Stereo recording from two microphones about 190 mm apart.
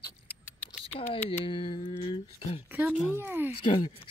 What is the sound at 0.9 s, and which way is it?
Speech, 30° left (ahead or behind).